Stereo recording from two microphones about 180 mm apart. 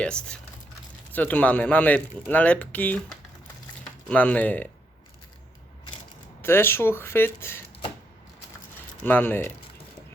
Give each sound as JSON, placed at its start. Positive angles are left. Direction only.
{"t": 0.0, "sound": "speech", "side_deg": 5}
{"t": 6.4, "sound": "speech", "side_deg": 15}
{"t": 9.0, "sound": "speech", "side_deg": 10}